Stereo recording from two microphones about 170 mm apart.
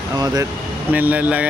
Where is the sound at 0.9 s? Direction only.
10° right (ahead or behind).